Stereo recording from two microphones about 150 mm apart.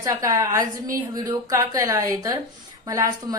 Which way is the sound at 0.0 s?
20° right (ahead or behind).